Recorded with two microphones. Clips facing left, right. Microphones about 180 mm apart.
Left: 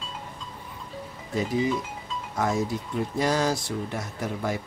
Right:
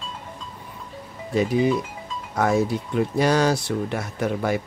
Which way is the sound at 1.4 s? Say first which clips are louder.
Right 5 dB; 70° right (ahead or behind).